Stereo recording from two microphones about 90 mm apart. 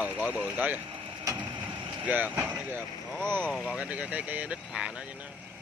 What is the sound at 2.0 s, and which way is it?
Speech, 20° right (ahead or behind).